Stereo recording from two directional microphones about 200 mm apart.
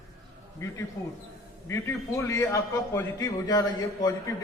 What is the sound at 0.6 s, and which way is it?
A man's voice, 15° left (ahead or behind).